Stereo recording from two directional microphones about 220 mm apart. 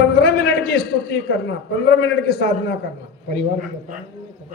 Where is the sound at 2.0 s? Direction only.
50° left (ahead or behind).